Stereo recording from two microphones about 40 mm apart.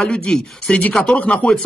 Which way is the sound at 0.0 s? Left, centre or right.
Left.